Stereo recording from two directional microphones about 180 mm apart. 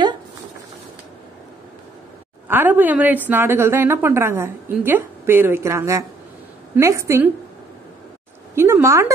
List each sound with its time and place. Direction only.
2.4 s a woman's voice: 10° right (ahead or behind)
8.5 s a woman's voice: 15° right (ahead or behind)